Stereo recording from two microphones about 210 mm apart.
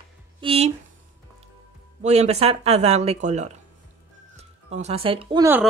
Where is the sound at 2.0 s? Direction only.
30° right (ahead or behind).